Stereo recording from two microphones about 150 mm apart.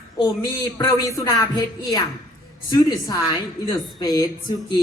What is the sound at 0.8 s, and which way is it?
Speech, 20° left (ahead or behind).